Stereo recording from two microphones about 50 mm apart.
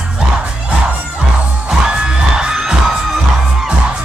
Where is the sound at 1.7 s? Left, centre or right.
Centre.